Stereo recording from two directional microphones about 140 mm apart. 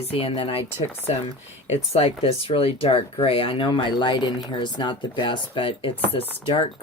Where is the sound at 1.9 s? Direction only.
45° left (ahead or behind).